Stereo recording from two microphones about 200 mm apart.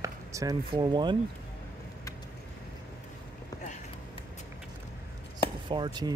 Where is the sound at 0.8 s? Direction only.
20° right (ahead or behind).